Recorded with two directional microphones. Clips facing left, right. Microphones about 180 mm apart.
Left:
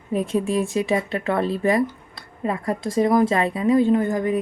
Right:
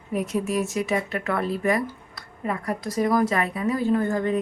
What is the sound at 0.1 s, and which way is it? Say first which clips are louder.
Speech: left 3 dB; 25° left (ahead or behind).